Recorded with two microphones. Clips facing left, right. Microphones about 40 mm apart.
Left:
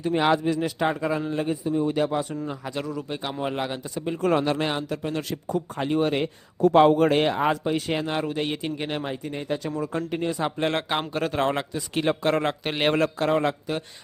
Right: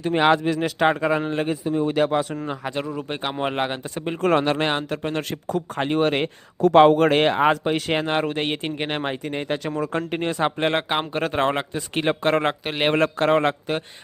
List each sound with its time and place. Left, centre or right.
0.0 s a man's voice: right
2.7 s a man's voice: right
3.0 s speech: right
5.5 s speech: right
10.6 s a man's voice: right
12.6 s a man's voice: centre
12.9 s speech: right